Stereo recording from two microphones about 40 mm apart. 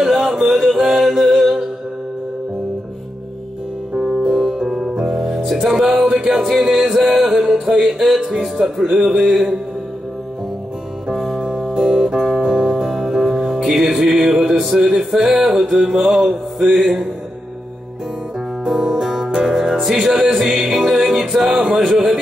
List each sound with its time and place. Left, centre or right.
0.0 s music: centre
3.9 s music: centre
7.0 s mantra: centre
7.4 s music: centre
8.2 s speech: right
8.6 s music: centre
9.1 s mantra: centre
11.1 s music: centre
11.3 s music: centre
16.0 s mantra: centre
18.6 s music: right; by 21.5 s centre
21.5 s speech: centre
21.9 s music: centre